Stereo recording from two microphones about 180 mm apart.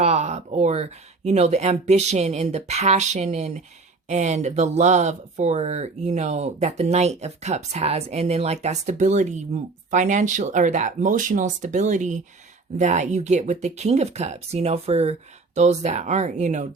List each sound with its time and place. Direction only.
0.0 s speech: 35° right (ahead or behind)